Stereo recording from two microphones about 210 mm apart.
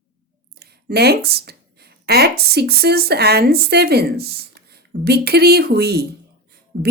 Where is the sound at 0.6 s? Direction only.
50° right (ahead or behind).